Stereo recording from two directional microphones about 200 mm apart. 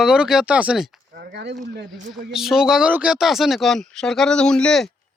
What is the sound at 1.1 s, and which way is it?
Speech, 55° right (ahead or behind).